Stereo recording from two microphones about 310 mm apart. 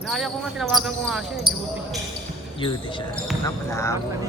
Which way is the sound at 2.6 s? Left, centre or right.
Centre.